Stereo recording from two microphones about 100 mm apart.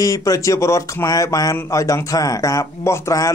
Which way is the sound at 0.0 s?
35° left (ahead or behind).